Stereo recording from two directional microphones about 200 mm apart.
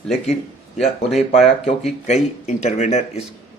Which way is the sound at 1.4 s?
35° left (ahead or behind).